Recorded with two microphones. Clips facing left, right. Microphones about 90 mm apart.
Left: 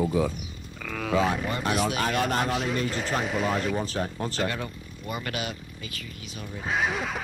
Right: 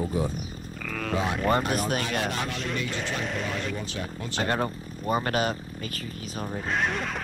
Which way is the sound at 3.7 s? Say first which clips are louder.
Left 5 dB; 40° left (ahead or behind).